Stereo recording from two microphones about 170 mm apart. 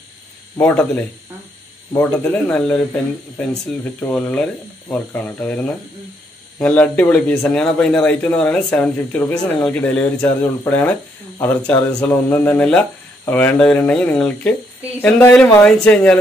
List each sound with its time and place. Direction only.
0.6 s speech: 10° left (ahead or behind)
3.8 s speech: 10° left (ahead or behind)